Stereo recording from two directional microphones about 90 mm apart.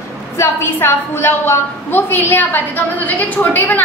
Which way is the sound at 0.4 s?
25° left (ahead or behind).